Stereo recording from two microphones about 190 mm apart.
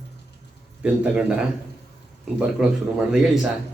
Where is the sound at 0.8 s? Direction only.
5° right (ahead or behind).